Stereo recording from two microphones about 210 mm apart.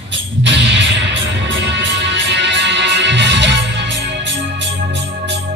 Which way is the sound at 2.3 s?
55° right (ahead or behind).